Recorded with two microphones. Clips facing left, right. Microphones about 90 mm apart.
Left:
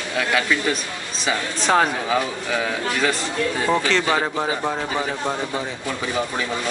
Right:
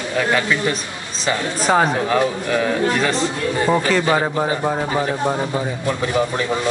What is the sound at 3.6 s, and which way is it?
A man's voice, 5° right (ahead or behind).